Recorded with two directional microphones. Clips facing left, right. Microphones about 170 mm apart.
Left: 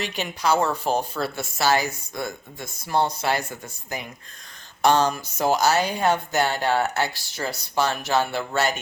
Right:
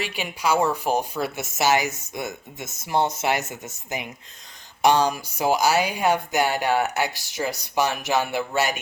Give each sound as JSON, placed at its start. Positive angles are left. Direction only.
{"t": 0.0, "sound": "speech", "side_deg": -10}